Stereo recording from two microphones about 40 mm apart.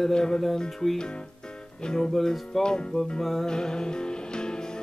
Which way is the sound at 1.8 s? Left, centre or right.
Centre.